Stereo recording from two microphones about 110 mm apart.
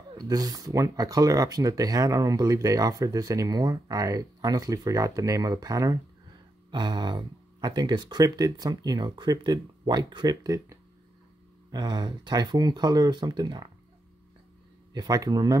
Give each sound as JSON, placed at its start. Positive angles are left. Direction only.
{"t": 0.3, "sound": "speech", "side_deg": -35}
{"t": 15.0, "sound": "speech", "side_deg": -35}